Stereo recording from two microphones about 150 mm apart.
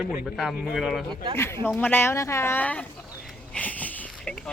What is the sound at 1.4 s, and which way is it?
Speech, 15° left (ahead or behind).